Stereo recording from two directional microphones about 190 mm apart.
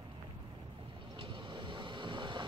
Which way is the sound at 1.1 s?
25° right (ahead or behind).